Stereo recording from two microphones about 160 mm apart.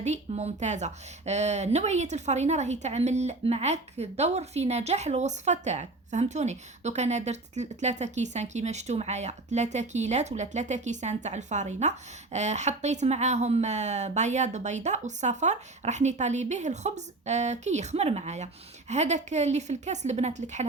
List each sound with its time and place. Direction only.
0.0 s a woman's voice: 45° right (ahead or behind)